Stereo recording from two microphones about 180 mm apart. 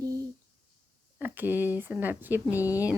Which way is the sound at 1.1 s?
10° right (ahead or behind).